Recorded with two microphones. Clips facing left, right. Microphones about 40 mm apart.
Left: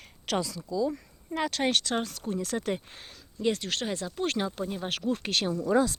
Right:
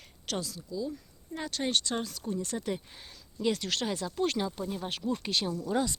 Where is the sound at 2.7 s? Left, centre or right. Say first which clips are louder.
Left 3 dB; left.